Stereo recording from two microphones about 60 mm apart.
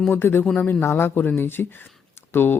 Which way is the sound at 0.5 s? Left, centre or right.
Left.